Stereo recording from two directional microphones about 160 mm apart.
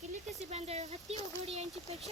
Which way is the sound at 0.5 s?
40° right (ahead or behind).